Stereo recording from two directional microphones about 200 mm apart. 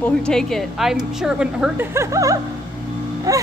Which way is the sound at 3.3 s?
15° right (ahead or behind).